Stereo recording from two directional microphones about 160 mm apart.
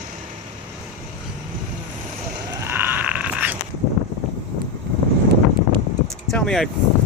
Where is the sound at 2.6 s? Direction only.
15° right (ahead or behind).